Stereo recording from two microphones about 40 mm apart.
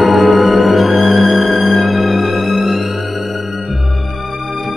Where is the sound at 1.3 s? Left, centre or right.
Right.